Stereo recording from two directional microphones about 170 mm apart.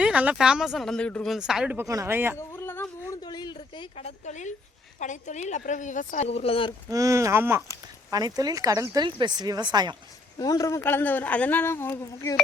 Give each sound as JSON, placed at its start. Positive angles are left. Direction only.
{"t": 0.0, "sound": "speech", "side_deg": -5}
{"t": 1.8, "sound": "speech", "side_deg": -20}
{"t": 2.4, "sound": "a sound", "side_deg": 15}
{"t": 3.2, "sound": "a sound", "side_deg": 25}
{"t": 3.9, "sound": "speech", "side_deg": 40}
{"t": 6.9, "sound": "speech", "side_deg": -20}
{"t": 10.3, "sound": "speech", "side_deg": 20}